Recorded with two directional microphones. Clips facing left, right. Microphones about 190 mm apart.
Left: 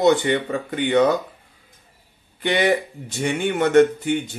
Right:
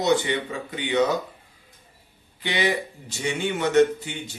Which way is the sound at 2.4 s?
55° left (ahead or behind).